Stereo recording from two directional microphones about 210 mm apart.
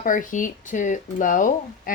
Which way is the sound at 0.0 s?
40° left (ahead or behind).